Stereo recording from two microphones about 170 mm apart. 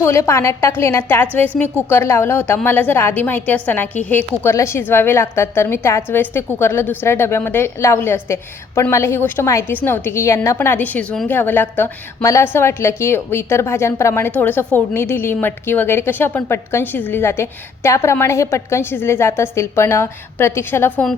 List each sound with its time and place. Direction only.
0.0 s a woman's voice: 15° left (ahead or behind)